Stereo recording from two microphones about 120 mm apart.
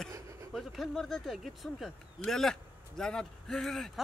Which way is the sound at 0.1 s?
25° right (ahead or behind).